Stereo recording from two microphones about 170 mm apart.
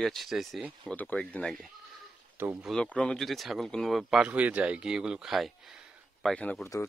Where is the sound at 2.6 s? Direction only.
5° left (ahead or behind).